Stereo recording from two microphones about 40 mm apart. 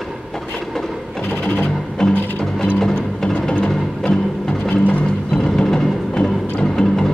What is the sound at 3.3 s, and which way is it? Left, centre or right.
Music, left.